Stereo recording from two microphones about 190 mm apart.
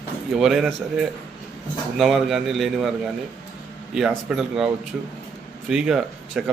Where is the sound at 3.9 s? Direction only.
Centre (ahead or behind).